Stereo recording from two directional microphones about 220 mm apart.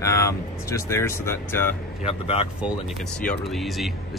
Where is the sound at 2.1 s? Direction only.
30° left (ahead or behind).